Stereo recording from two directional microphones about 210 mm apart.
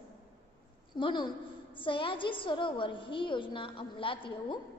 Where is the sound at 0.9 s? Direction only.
20° left (ahead or behind).